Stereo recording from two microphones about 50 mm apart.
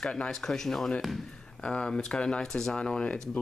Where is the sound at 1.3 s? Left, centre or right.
Centre.